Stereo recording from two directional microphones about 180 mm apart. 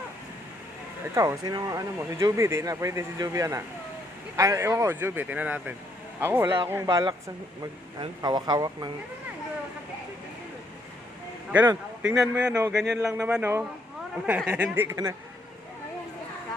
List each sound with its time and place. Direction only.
1.1 s speech: 15° right (ahead or behind)
11.5 s speech: 10° right (ahead or behind)